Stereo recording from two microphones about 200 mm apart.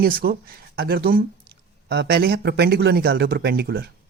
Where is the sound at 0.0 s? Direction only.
50° right (ahead or behind).